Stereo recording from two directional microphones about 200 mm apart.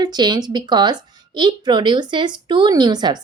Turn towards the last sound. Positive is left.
turn(degrees=-20)  # may be behind; listen again after turning